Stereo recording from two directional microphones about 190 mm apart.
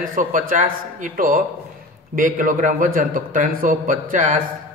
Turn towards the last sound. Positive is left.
turn(degrees=-40)  # may be behind; listen again after turning